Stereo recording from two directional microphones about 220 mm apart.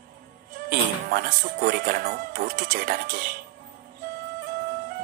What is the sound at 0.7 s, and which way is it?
Speech, 40° right (ahead or behind).